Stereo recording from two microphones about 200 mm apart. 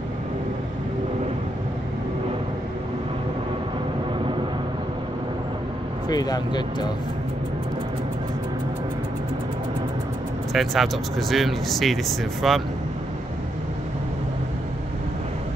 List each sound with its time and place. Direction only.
6.0 s speech: 20° left (ahead or behind)
10.5 s speech: centre (ahead or behind)